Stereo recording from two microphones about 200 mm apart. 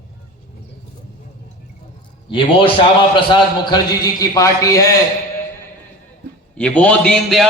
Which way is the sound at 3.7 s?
20° left (ahead or behind).